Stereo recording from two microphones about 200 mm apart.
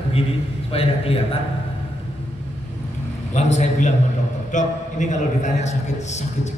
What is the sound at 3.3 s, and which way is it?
A man's voice, 35° left (ahead or behind).